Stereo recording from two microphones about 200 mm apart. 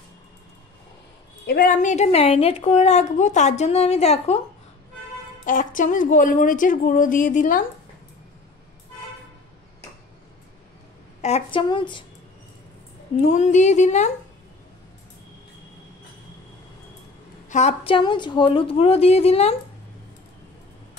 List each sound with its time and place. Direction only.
1.4 s a woman's voice: 50° left (ahead or behind); by 4.4 s 30° left (ahead or behind)
5.4 s a woman's voice: 40° left (ahead or behind)
11.1 s a woman's voice: 30° left (ahead or behind)
13.3 s a woman's voice: 35° left (ahead or behind)
17.5 s a woman's voice: 35° left (ahead or behind)